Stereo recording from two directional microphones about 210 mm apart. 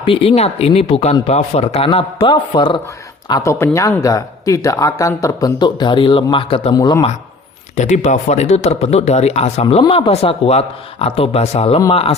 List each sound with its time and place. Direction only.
0.0 s speech: 25° left (ahead or behind)
7.8 s speech: 35° left (ahead or behind)